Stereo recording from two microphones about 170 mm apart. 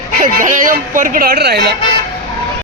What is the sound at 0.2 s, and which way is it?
Speech, 50° right (ahead or behind).